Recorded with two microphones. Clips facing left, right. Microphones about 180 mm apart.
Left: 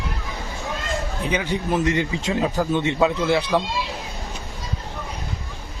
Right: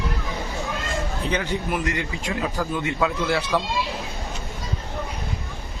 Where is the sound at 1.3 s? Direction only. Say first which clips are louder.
Left 3 dB; 15° left (ahead or behind).